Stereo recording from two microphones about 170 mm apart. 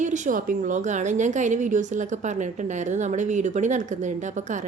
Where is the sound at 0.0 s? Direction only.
50° right (ahead or behind).